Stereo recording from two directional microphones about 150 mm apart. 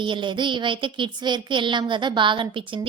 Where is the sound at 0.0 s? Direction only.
30° right (ahead or behind).